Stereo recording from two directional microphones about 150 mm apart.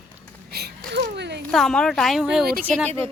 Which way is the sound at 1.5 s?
5° left (ahead or behind).